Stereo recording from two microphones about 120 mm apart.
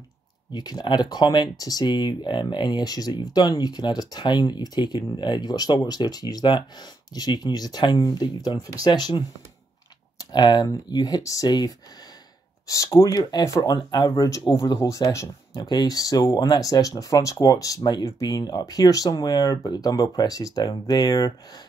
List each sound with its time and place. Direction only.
0.5 s speech: 35° left (ahead or behind)